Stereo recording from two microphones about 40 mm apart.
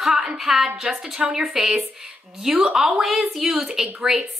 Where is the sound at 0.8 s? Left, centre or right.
Right.